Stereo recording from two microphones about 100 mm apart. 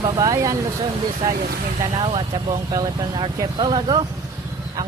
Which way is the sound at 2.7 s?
45° right (ahead or behind).